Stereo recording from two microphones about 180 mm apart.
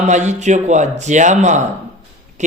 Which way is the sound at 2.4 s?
40° right (ahead or behind).